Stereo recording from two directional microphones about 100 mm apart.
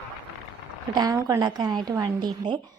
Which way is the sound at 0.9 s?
35° right (ahead or behind).